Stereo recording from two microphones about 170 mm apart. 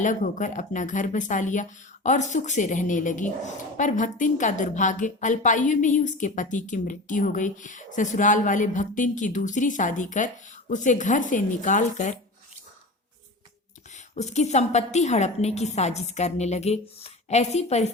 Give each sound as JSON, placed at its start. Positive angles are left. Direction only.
{"t": 0.0, "sound": "a woman's voice", "side_deg": 50}
{"t": 13.9, "sound": "a woman's voice", "side_deg": 40}